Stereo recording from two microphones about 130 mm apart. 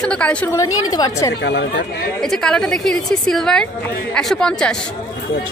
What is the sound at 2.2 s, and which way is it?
A woman's voice, 5° left (ahead or behind).